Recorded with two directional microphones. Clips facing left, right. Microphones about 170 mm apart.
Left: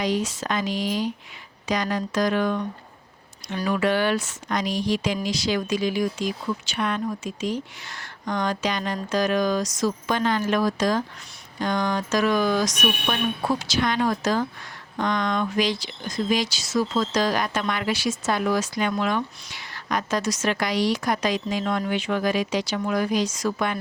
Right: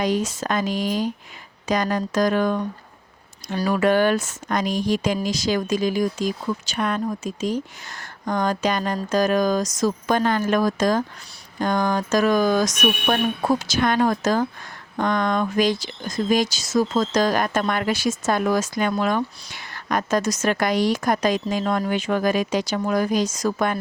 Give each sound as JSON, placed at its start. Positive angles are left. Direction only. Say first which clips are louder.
{"t": 0.0, "sound": "speech", "louder": "right 2 dB", "side_deg": -45}